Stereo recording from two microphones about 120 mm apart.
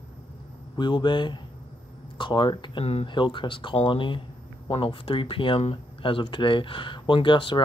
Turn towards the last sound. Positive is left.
turn(degrees=40)  # may be behind; listen again after turning